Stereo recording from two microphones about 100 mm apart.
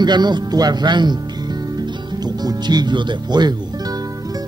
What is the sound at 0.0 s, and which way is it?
Speech, 45° right (ahead or behind).